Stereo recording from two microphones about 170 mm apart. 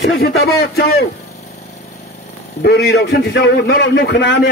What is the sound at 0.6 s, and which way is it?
Speech, 70° left (ahead or behind).